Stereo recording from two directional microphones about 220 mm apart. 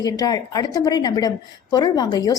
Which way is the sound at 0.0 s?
15° left (ahead or behind).